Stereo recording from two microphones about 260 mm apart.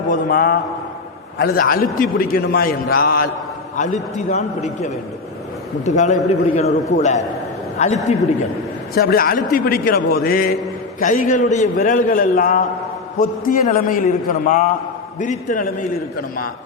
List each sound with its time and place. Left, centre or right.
0.1 s a man's voice: left
9.0 s a man's voice: left